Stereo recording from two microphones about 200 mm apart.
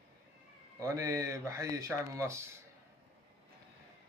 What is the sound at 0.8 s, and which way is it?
A man's voice, 15° right (ahead or behind).